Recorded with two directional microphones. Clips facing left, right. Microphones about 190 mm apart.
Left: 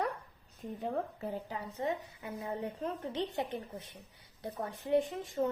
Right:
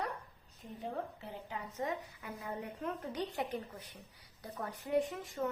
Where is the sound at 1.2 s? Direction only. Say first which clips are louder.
Left 5 dB; 35° left (ahead or behind).